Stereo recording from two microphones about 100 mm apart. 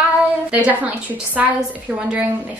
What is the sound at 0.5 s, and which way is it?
A woman's voice, 15° right (ahead or behind).